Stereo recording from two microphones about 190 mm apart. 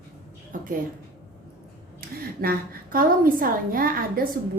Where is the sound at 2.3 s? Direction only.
50° right (ahead or behind).